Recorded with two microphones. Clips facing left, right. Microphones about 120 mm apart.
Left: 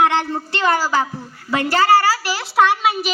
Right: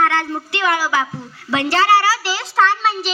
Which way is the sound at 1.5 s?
15° left (ahead or behind).